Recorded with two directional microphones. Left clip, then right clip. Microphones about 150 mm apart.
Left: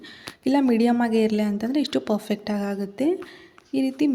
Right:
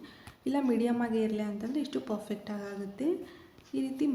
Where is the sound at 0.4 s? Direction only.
45° left (ahead or behind).